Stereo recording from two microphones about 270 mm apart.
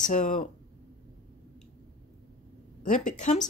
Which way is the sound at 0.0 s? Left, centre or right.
Left.